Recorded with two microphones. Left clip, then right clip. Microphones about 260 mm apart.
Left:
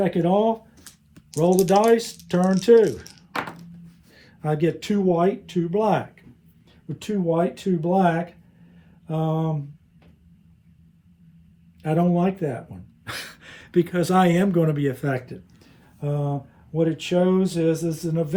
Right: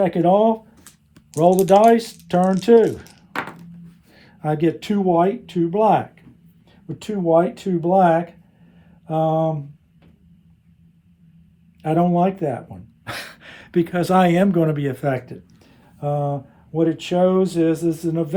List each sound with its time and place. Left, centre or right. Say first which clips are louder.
0.0 s speech: right 5 dB; right
4.1 s speech: right 3 dB; right
11.8 s speech: right 5 dB; right